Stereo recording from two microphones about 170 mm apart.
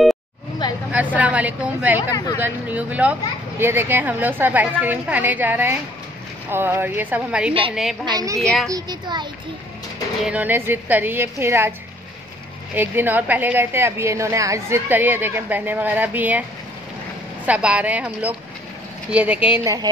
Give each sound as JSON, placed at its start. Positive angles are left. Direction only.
{"t": 0.6, "sound": "vehicle", "side_deg": 25}
{"t": 0.9, "sound": "a woman's voice", "side_deg": -10}
{"t": 2.0, "sound": "speech", "side_deg": 20}
{"t": 2.4, "sound": "a woman's voice", "side_deg": -10}
{"t": 8.0, "sound": "a child's voice", "side_deg": -25}
{"t": 8.4, "sound": "a woman's voice", "side_deg": 0}
{"t": 8.6, "sound": "a child's voice", "side_deg": -25}
{"t": 10.2, "sound": "a woman's voice", "side_deg": -10}
{"t": 12.7, "sound": "a woman's voice", "side_deg": -10}
{"t": 17.5, "sound": "a woman's voice", "side_deg": -5}
{"t": 19.6, "sound": "a child's voice", "side_deg": -20}